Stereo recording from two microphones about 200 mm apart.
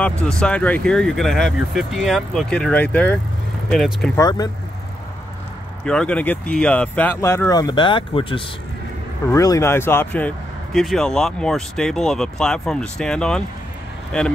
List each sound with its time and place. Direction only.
0.0 s speech: 5° left (ahead or behind)
4.2 s speech: 20° left (ahead or behind)
5.9 s speech: 5° left (ahead or behind)